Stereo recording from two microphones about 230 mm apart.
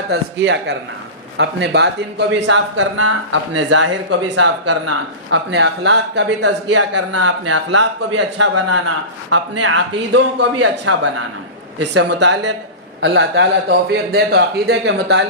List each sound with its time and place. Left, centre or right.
0.1 s speech: right
6.9 s a man's voice: right
7.3 s speech: right
8.4 s a man's voice: right
9.3 s speech: right
10.8 s speech: right
11.8 s speech: right